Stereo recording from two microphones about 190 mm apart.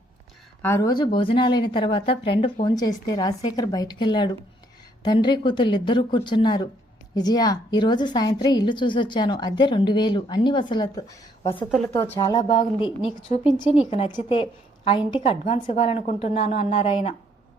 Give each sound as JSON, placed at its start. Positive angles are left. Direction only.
{"t": 0.6, "sound": "a woman's voice", "side_deg": 15}